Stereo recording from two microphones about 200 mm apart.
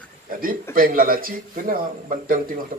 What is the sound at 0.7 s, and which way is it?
A man's voice, 45° right (ahead or behind).